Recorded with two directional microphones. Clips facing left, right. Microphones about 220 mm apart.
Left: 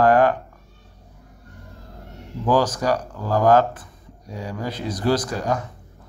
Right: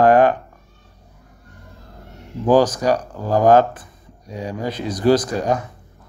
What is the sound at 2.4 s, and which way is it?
Speech, 15° right (ahead or behind).